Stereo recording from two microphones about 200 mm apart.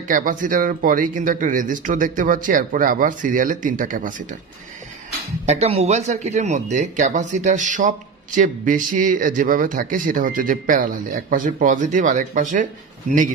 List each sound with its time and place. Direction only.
0.1 s speech: 45° right (ahead or behind)
5.4 s speech: 30° right (ahead or behind)